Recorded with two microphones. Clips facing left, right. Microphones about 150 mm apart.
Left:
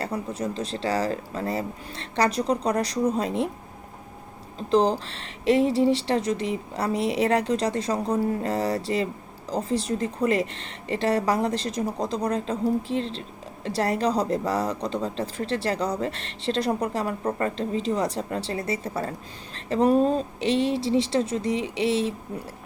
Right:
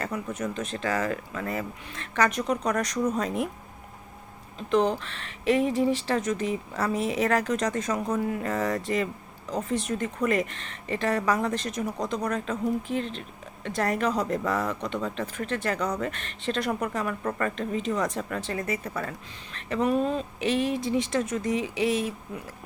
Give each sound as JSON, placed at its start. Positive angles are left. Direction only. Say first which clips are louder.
{"t": 0.0, "sound": "a woman's voice", "louder": "left 2 dB", "side_deg": 30}
{"t": 4.5, "sound": "a woman's voice", "louder": "left 3 dB", "side_deg": 35}